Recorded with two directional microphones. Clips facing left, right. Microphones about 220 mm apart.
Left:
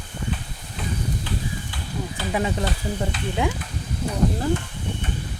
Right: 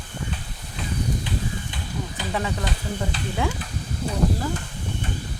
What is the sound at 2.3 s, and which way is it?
Speech, 20° left (ahead or behind).